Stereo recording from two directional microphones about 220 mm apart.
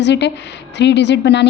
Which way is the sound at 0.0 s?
50° left (ahead or behind).